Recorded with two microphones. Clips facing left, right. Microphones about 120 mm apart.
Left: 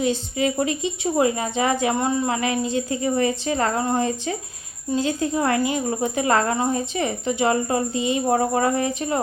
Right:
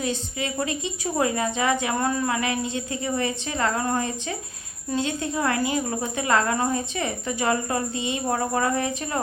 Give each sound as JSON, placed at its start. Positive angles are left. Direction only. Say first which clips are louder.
{"t": 0.0, "sound": "a woman's voice", "louder": "left 6 dB", "side_deg": 30}